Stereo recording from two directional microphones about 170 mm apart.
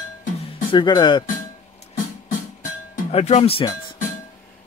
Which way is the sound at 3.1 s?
40° left (ahead or behind).